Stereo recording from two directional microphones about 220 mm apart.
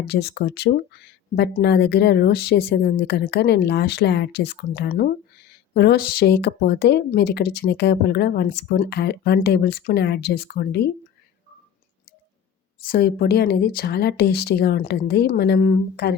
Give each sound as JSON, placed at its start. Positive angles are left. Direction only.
{"t": 0.0, "sound": "speech", "side_deg": 50}
{"t": 12.8, "sound": "speech", "side_deg": 45}